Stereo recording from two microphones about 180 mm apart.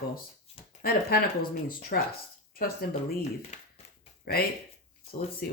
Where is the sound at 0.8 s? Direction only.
55° left (ahead or behind).